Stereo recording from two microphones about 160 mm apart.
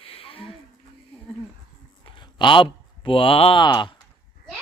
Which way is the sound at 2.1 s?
30° left (ahead or behind).